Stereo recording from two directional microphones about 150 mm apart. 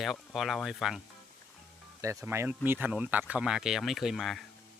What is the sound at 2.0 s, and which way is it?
Speech, 20° right (ahead or behind).